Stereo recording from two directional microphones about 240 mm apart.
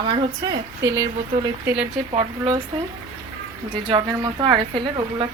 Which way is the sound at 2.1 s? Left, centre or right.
Right.